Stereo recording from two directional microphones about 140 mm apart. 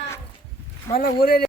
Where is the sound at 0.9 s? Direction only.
90° left.